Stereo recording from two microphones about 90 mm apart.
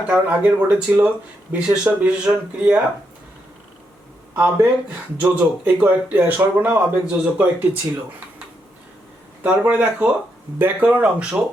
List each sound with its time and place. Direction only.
0.1 s speech: 15° right (ahead or behind)
4.4 s speech: 20° right (ahead or behind)
9.4 s speech: 15° right (ahead or behind)